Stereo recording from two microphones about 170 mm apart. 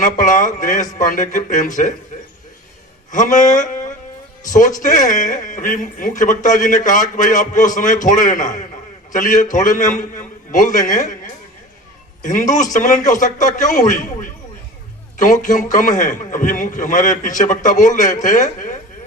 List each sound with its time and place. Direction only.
0.0 s a man's voice: 50° left (ahead or behind)
3.1 s a man's voice: 50° left (ahead or behind)
12.2 s a man's voice: 50° left (ahead or behind)